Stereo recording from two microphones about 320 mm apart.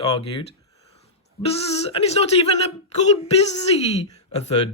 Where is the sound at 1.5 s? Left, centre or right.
Centre.